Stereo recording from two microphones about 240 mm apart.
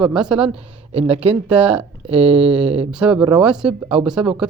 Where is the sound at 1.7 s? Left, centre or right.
Right.